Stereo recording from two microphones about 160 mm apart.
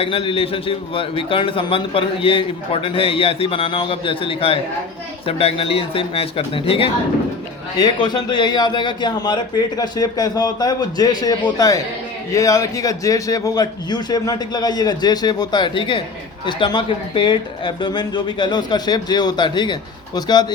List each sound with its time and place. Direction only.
0.0 s a man's voice: 35° left (ahead or behind)